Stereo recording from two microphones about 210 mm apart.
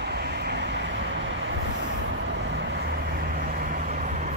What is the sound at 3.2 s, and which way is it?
Vehicle, 40° right (ahead or behind).